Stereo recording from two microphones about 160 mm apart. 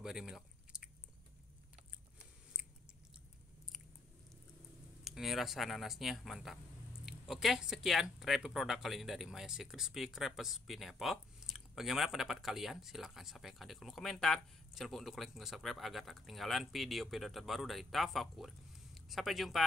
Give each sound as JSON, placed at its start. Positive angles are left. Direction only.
{"t": 0.0, "sound": "chewing", "side_deg": -5}
{"t": 5.0, "sound": "speech", "side_deg": 0}